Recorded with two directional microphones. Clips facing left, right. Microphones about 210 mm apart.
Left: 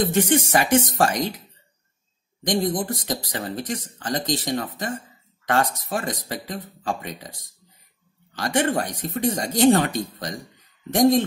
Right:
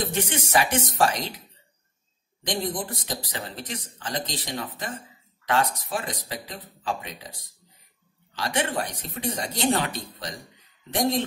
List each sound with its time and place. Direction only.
0.1 s speech: 45° left (ahead or behind)
2.4 s speech: 45° left (ahead or behind)
8.4 s speech: 45° left (ahead or behind)